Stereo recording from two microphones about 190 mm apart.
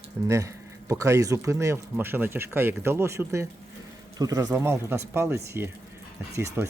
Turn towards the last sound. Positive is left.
turn(degrees=-15)  # may be behind; listen again after turning